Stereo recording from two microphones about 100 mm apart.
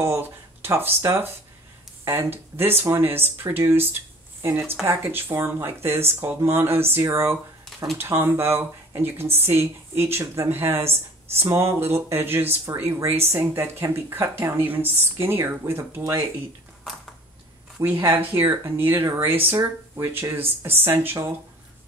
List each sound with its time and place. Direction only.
0.0 s a woman's voice: 25° right (ahead or behind)
17.7 s speech: 25° right (ahead or behind)